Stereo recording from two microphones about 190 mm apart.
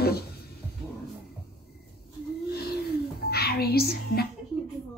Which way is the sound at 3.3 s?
55° left (ahead or behind).